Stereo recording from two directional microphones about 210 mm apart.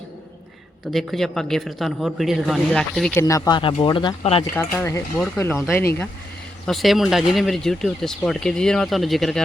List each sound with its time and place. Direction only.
0.9 s speech: centre (ahead or behind)
3.2 s speech: 15° left (ahead or behind)
4.5 s speech: 10° left (ahead or behind)
6.7 s speech: centre (ahead or behind)